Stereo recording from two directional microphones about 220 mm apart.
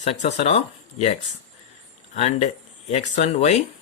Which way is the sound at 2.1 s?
30° left (ahead or behind).